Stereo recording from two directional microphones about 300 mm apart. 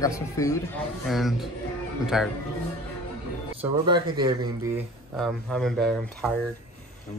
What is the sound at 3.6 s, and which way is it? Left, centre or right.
Speech, centre.